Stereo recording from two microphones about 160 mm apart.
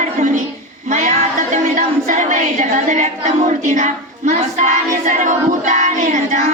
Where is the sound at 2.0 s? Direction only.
50° right (ahead or behind).